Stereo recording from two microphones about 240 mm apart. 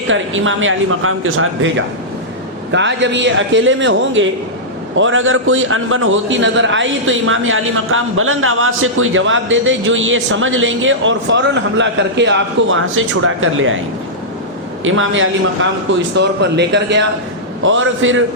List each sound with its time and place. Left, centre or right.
0.1 s a man's voice: right
2.7 s a man's voice: right
14.8 s a man's voice: right